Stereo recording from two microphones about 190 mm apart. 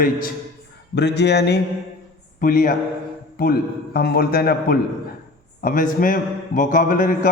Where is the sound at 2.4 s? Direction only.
45° left (ahead or behind).